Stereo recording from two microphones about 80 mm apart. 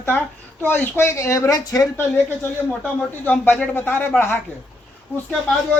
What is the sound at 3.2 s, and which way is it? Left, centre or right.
Speech, left.